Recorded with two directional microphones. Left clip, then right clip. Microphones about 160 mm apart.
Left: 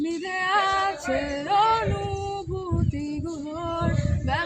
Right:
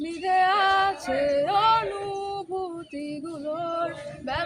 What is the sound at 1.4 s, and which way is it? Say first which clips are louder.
Singing: left 1 dB; 25° right (ahead or behind).